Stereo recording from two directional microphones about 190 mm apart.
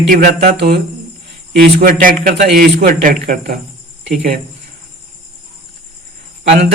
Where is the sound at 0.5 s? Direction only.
60° right (ahead or behind).